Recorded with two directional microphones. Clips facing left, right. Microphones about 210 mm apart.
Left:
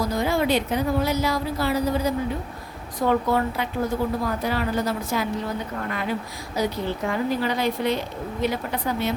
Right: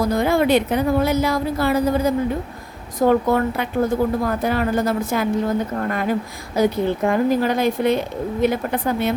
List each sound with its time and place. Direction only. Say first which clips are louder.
0.1 s a woman's voice: right 6 dB; 55° right (ahead or behind)